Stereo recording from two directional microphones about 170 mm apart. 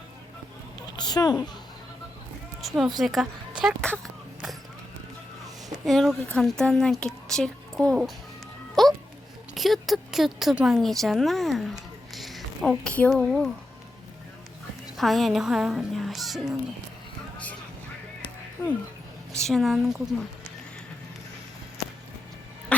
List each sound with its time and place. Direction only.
0.9 s speech: 25° left (ahead or behind)
2.6 s speech: centre (ahead or behind)
5.8 s speech: centre (ahead or behind)
8.7 s music: centre (ahead or behind)
9.6 s speech: centre (ahead or behind)
14.9 s speech: centre (ahead or behind)
17.3 s vehicle: 10° left (ahead or behind)
19.3 s speech: 5° left (ahead or behind)